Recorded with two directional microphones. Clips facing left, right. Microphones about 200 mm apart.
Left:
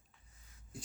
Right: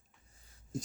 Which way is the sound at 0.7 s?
40° right (ahead or behind).